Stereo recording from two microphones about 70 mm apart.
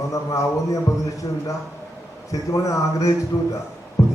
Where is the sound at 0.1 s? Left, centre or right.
Left.